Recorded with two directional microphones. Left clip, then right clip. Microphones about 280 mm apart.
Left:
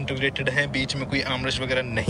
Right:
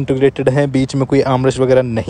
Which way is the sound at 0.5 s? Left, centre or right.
Right.